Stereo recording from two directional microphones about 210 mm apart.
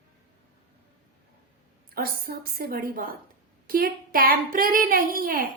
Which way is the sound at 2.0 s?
45° right (ahead or behind).